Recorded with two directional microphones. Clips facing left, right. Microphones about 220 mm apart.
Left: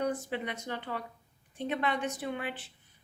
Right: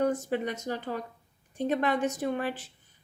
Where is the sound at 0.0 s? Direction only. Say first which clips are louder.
Right 5 dB; 45° right (ahead or behind).